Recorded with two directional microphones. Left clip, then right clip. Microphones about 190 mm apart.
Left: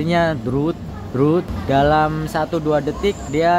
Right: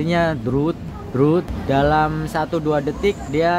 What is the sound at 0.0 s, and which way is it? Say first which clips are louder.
Speech: left 1 dB; 5° left (ahead or behind).